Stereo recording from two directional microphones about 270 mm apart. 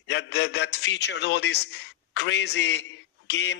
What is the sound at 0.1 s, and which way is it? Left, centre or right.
A man's voice, left.